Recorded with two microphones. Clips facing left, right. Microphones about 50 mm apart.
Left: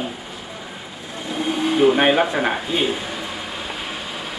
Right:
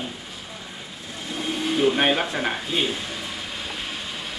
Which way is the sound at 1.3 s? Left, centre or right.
Centre.